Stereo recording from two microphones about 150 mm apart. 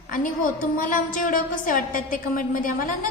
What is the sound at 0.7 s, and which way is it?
A woman's voice, 65° left (ahead or behind).